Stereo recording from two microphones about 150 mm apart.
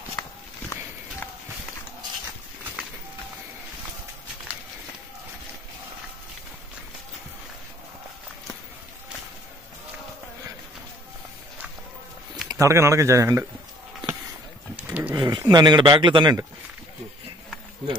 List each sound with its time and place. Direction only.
0.2 s walk: 20° left (ahead or behind)
12.4 s speech: 20° right (ahead or behind)
14.8 s wild animals: 10° right (ahead or behind)
15.1 s speech: 25° right (ahead or behind)